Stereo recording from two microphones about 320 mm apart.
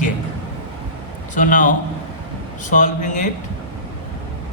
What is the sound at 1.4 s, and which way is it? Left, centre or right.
Speech, left.